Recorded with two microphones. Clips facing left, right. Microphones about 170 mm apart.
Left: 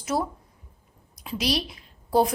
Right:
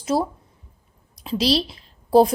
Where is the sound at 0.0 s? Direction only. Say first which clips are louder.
Right 5 dB; 30° right (ahead or behind).